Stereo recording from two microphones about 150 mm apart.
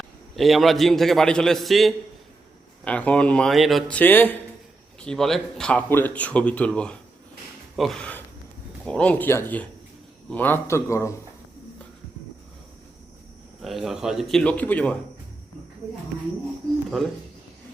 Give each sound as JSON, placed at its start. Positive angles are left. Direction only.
{"t": 0.3, "sound": "a man's voice", "side_deg": 0}
{"t": 13.6, "sound": "a man's voice", "side_deg": 0}